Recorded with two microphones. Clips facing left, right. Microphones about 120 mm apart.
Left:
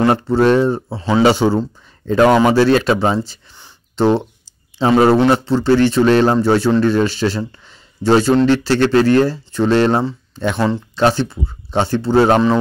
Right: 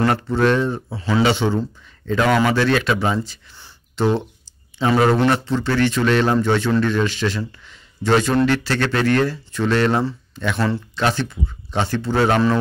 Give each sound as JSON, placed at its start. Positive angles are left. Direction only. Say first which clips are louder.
{"t": 0.0, "sound": "speech", "louder": "left 5 dB", "side_deg": 25}
{"t": 1.2, "sound": "speech", "louder": "left 6 dB", "side_deg": 40}
{"t": 3.9, "sound": "a sound", "louder": "left 5 dB", "side_deg": 30}
{"t": 4.7, "sound": "speech", "louder": "left 5 dB", "side_deg": 30}